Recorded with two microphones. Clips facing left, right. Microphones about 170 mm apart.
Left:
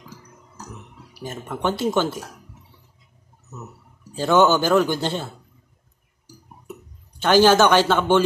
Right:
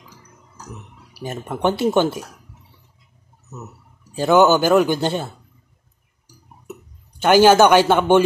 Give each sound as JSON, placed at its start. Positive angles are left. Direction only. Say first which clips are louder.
{"t": 1.5, "sound": "speech", "louder": "right 4 dB", "side_deg": -20}
{"t": 4.1, "sound": "speech", "louder": "right 3 dB", "side_deg": -10}
{"t": 7.2, "sound": "speech", "louder": "right 3 dB", "side_deg": -15}